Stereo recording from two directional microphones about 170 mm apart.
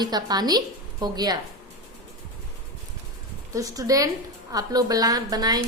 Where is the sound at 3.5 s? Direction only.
20° right (ahead or behind).